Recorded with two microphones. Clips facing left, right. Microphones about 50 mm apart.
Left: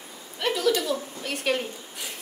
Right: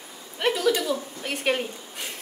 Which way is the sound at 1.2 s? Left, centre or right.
Right.